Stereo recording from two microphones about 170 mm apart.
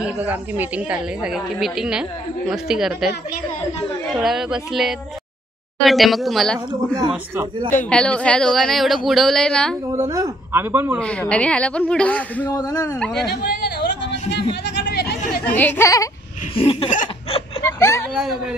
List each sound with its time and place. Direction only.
0.0 s a woman's voice: 10° right (ahead or behind)
4.1 s a woman's voice: centre (ahead or behind)
9.9 s speech: 20° right (ahead or behind)
11.0 s a woman's voice: 5° left (ahead or behind)
12.4 s speech: 20° left (ahead or behind)
13.3 s a sound: 70° left (ahead or behind)
14.6 s hubbub: 85° left
15.4 s a woman's voice: 10° left (ahead or behind)
16.5 s a sound: 35° left (ahead or behind)
17.6 s a sound: 15° left (ahead or behind)
18.1 s a woman's voice: centre (ahead or behind)